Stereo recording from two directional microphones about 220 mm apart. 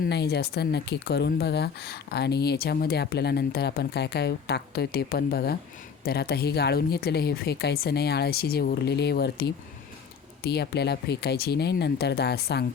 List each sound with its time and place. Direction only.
0.0 s speech: 50° left (ahead or behind)